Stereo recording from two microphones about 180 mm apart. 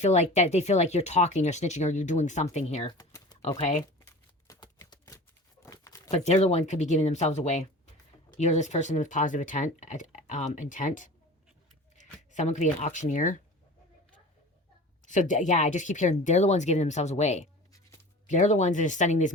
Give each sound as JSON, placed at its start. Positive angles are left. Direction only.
{"t": 0.0, "sound": "speech", "side_deg": 40}
{"t": 2.8, "sound": "typing", "side_deg": 20}
{"t": 3.6, "sound": "speech", "side_deg": 35}
{"t": 4.4, "sound": "typewriter", "side_deg": 20}
{"t": 5.6, "sound": "crumpling", "side_deg": 20}
{"t": 6.1, "sound": "speech", "side_deg": 35}
{"t": 15.0, "sound": "speech", "side_deg": 45}
{"t": 17.7, "sound": "music", "side_deg": 20}
{"t": 18.3, "sound": "speech", "side_deg": 40}